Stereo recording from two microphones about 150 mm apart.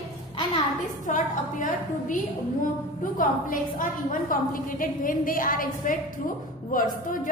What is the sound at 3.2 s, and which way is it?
A woman's voice, 65° left (ahead or behind).